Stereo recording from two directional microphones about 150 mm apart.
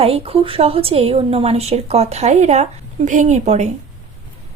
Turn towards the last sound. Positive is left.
turn(degrees=-50)  # may be behind; listen again after turning